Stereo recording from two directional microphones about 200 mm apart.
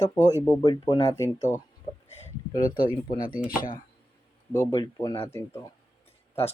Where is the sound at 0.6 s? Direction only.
20° left (ahead or behind).